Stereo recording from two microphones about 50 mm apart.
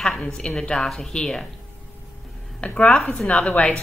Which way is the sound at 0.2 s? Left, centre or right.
Centre.